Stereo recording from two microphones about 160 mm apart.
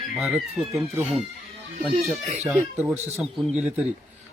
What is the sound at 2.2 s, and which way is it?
Speech, 40° right (ahead or behind).